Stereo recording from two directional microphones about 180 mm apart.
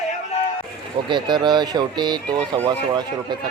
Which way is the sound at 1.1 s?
25° right (ahead or behind).